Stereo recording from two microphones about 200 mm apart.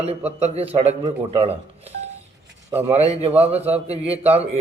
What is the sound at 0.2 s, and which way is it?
Speech, 10° right (ahead or behind).